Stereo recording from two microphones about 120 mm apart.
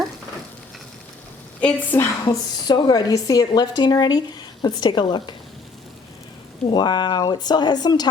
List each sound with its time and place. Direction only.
1.6 s a woman's voice: 15° left (ahead or behind)
2.2 s a woman's voice: 35° left (ahead or behind)
6.7 s a woman's voice: 35° left (ahead or behind)